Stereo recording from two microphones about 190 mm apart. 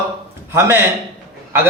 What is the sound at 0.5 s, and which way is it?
Speech, 15° right (ahead or behind).